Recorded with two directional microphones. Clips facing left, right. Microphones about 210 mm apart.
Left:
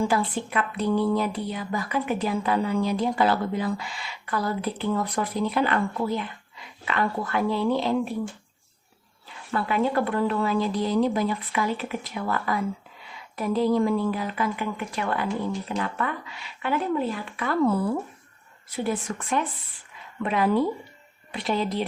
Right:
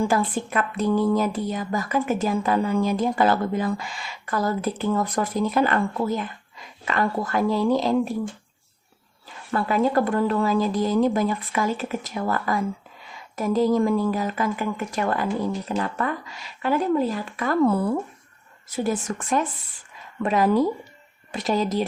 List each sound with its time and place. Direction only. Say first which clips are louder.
0.1 s a woman's voice: right 2 dB; 45° right (ahead or behind)
9.5 s a woman's voice: right 3 dB; 40° right (ahead or behind)
18.8 s a woman's voice: right 3 dB; 40° right (ahead or behind)